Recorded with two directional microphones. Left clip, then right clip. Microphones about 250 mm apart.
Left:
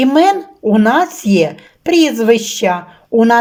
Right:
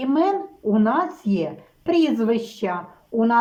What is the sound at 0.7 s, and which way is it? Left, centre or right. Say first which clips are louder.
Speech: left 9 dB; left.